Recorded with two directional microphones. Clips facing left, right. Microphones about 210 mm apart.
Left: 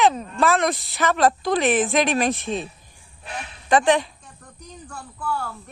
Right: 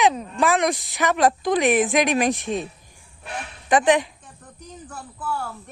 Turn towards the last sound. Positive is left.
turn(degrees=-5)  # may be behind; listen again after turning